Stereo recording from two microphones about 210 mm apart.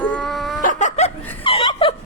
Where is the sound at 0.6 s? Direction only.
35° left (ahead or behind).